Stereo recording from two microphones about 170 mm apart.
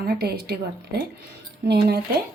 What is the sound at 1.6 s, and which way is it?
Speech, 75° right (ahead or behind).